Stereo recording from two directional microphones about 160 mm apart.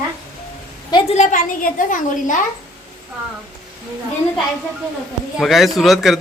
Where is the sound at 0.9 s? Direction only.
35° left (ahead or behind).